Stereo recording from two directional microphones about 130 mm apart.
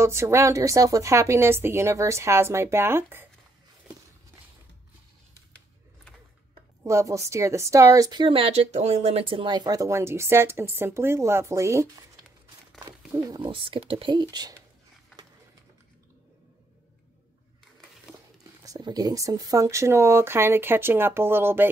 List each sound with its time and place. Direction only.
0.0 s a woman's voice: 20° right (ahead or behind)
6.8 s a woman's voice: 25° right (ahead or behind)
13.4 s speech: 40° right (ahead or behind)
18.6 s a woman's voice: 30° right (ahead or behind)